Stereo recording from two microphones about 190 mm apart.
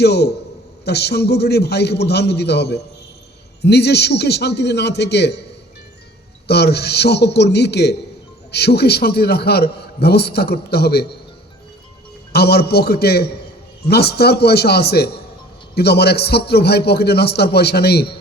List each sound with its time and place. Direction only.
0.0 s a man's voice: 60° left (ahead or behind)
6.5 s a man's voice: 60° left (ahead or behind)
12.3 s a man's voice: 55° left (ahead or behind)